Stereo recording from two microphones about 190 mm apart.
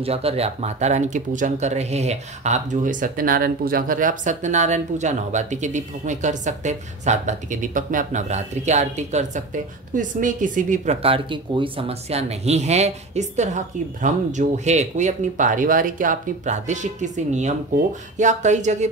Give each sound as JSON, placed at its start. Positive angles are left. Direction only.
{"t": 0.0, "sound": "speech", "side_deg": -30}